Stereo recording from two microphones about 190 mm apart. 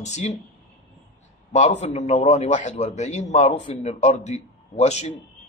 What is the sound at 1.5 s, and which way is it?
A man's voice, 35° left (ahead or behind).